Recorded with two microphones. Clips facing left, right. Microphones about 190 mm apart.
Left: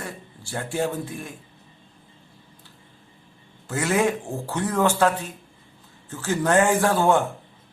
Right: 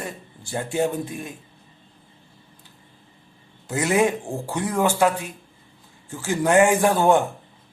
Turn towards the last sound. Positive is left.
turn(degrees=-15)  # may be behind; listen again after turning